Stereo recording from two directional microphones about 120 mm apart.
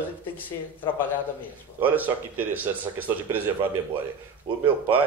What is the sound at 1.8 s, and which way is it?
Speech, 15° right (ahead or behind).